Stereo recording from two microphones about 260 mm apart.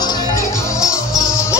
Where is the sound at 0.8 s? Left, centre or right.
Centre.